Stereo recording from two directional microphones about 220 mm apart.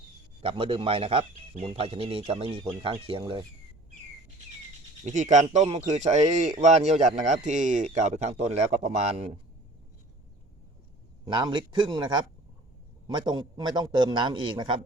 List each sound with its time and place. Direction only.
0.4 s speech: 25° right (ahead or behind)
5.0 s a man's voice: 35° right (ahead or behind)
11.3 s speech: 20° right (ahead or behind)